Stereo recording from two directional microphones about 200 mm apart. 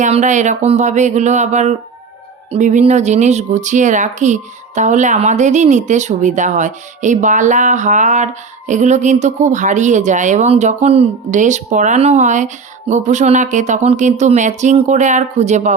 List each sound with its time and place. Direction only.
0.0 s speech: 35° right (ahead or behind)